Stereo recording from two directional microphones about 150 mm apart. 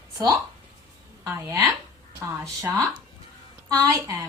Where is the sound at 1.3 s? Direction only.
15° right (ahead or behind).